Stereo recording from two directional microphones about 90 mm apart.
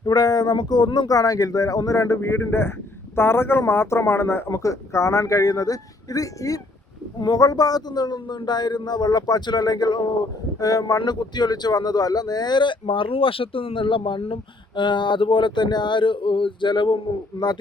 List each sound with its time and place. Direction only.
0.0 s speech: 50° left (ahead or behind); by 14.3 s 80° left
14.8 s speech: 60° left (ahead or behind)